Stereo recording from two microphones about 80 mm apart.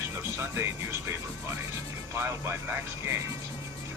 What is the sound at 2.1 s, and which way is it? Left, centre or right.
Speech, right.